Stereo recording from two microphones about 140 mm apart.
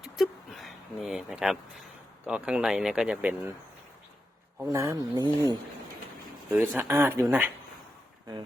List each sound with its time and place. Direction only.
0.0 s vehicle: centre (ahead or behind)
2.2 s speech: 10° right (ahead or behind)
4.7 s speech: 20° right (ahead or behind)
6.5 s speech: 15° right (ahead or behind)